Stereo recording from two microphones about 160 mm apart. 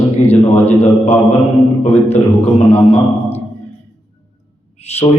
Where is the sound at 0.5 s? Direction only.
10° left (ahead or behind).